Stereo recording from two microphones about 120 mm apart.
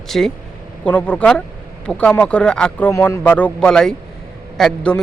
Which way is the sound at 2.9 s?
25° left (ahead or behind).